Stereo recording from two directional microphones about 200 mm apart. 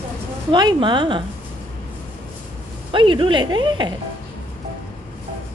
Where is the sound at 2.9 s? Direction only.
25° right (ahead or behind).